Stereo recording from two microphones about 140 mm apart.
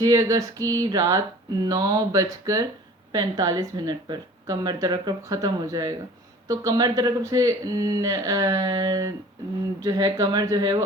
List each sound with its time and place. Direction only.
0.0 s speech: 25° right (ahead or behind)